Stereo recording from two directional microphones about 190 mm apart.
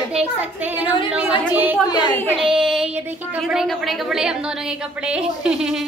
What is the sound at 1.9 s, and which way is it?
Speech, 20° left (ahead or behind).